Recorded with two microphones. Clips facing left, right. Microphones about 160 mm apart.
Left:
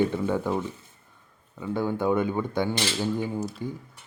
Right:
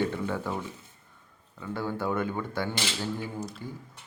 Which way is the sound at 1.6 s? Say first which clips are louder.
Left 5 dB; 15° left (ahead or behind).